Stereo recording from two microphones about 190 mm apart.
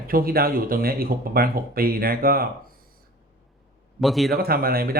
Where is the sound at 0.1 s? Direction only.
50° right (ahead or behind).